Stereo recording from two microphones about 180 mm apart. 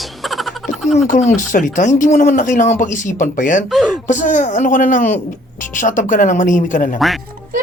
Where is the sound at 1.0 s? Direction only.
45° left (ahead or behind).